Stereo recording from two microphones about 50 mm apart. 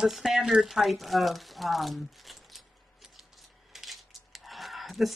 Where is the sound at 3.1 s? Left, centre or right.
Centre.